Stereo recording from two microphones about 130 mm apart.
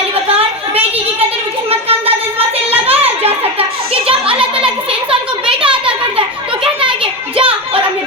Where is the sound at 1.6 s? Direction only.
50° right (ahead or behind).